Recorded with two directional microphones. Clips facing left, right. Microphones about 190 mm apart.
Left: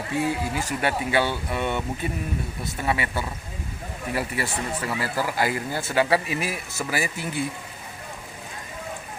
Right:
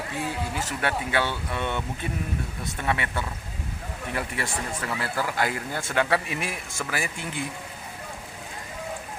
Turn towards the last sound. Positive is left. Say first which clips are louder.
# left 3 dB
turn(degrees=5)  # may be behind; listen again after turning